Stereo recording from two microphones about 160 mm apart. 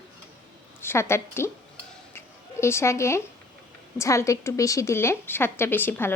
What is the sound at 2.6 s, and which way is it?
A woman's voice, 15° left (ahead or behind).